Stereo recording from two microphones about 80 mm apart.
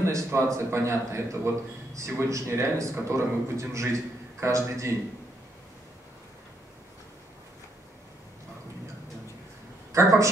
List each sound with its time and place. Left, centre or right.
0.0 s a man's voice: right
9.9 s a man's voice: right